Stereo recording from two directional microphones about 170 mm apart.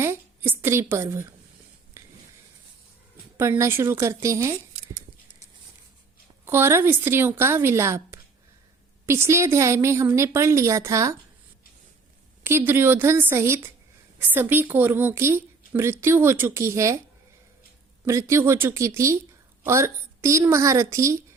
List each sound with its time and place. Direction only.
0.0 s a woman's voice: 15° right (ahead or behind)
2.0 s a sound: 15° right (ahead or behind)
3.3 s a woman's voice: 15° right (ahead or behind)
6.4 s a woman's voice: 15° right (ahead or behind)
12.4 s a woman's voice: 15° right (ahead or behind)
18.0 s a woman's voice: 15° right (ahead or behind)